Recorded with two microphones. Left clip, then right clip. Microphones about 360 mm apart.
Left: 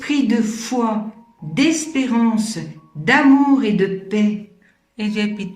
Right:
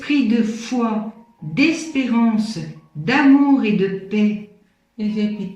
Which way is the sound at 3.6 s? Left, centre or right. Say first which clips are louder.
Left 1 dB; centre.